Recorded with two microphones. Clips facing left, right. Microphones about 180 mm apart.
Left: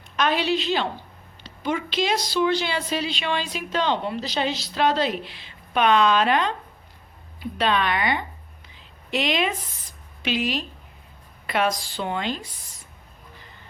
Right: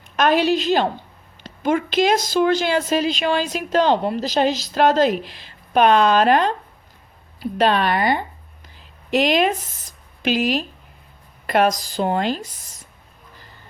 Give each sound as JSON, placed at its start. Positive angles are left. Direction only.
{"t": 0.2, "sound": "a woman's voice", "side_deg": -45}
{"t": 7.6, "sound": "a woman's voice", "side_deg": -40}